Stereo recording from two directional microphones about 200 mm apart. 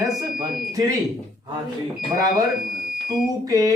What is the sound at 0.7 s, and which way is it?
Speech, 15° right (ahead or behind).